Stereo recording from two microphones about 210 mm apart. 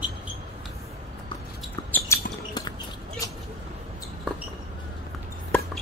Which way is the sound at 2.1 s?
15° left (ahead or behind).